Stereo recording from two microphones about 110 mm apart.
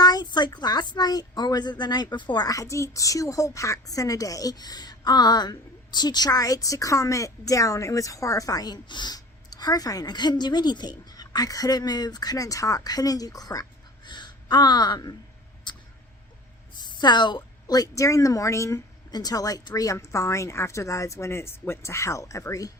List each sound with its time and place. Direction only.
0.0 s a woman's voice: 40° left (ahead or behind)
15.7 s a sound: 45° left (ahead or behind)
16.8 s a woman's voice: 40° left (ahead or behind)